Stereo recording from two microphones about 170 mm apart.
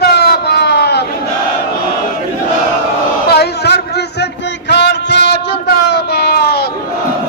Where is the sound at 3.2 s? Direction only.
70° left (ahead or behind).